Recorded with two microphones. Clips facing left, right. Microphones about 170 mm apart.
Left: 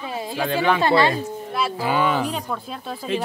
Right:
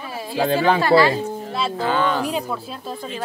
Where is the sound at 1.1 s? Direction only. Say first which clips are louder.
Right 2 dB; 25° right (ahead or behind).